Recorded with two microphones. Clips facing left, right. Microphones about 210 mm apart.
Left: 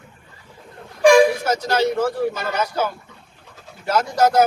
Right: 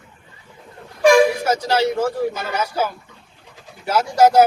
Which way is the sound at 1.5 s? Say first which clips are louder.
Right 1 dB; 10° right (ahead or behind).